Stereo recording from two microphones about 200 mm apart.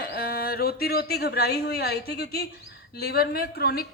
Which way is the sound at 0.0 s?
50° left (ahead or behind).